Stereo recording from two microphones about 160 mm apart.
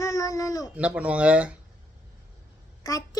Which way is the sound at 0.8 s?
10° right (ahead or behind).